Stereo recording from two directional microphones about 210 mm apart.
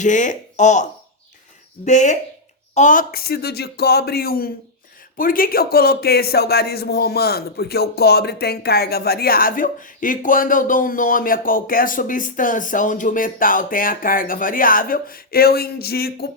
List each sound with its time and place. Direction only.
0.0 s speech: 35° left (ahead or behind)